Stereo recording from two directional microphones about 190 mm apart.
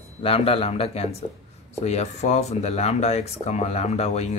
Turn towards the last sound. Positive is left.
turn(degrees=35)  # may be behind; listen again after turning